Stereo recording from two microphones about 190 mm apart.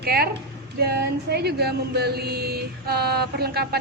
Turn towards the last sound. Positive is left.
turn(degrees=-55)  # may be behind; listen again after turning